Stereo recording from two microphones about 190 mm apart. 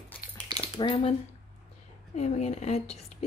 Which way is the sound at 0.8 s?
25° left (ahead or behind).